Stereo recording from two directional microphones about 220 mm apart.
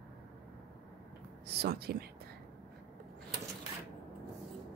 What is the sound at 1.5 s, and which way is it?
Speech, 45° right (ahead or behind).